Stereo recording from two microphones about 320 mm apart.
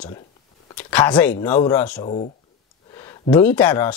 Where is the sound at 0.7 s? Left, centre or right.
Centre.